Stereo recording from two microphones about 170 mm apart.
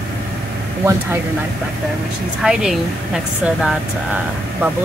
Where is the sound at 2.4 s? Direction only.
5° right (ahead or behind).